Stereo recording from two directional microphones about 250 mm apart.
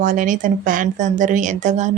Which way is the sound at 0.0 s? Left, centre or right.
Right.